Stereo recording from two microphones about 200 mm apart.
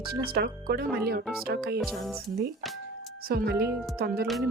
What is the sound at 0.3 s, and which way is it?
Speech, 50° right (ahead or behind).